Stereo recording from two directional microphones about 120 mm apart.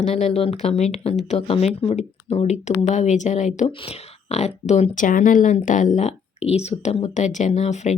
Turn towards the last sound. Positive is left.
turn(degrees=75)  # may be behind; listen again after turning